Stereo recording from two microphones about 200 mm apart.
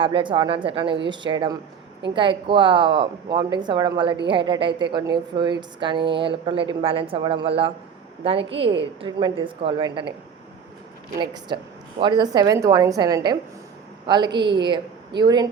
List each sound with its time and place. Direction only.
0.0 s a woman's voice: 25° right (ahead or behind)
11.2 s a woman's voice: 25° right (ahead or behind)